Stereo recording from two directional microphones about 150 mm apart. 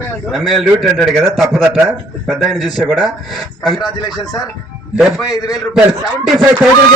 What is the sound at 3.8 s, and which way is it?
Speech, 30° left (ahead or behind).